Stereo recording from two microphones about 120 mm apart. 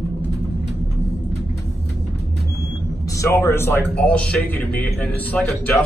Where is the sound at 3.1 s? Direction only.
25° left (ahead or behind).